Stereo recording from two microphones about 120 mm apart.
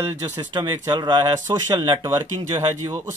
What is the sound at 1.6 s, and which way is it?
Speech, 25° right (ahead or behind).